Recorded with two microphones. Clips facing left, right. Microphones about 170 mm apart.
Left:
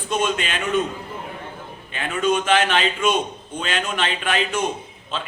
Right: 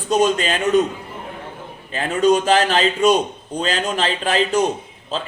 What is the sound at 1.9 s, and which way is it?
A man's voice, 35° right (ahead or behind).